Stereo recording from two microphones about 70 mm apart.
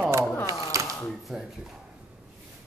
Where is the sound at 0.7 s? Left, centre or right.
Right.